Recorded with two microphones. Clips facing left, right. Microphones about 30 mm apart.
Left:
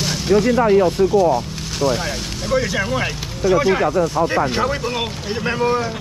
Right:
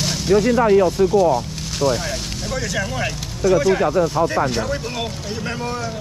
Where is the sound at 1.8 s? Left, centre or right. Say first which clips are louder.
Even; centre.